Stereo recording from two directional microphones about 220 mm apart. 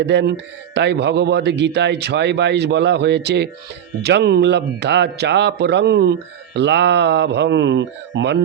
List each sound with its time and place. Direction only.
0.0 s speech: 50° right (ahead or behind)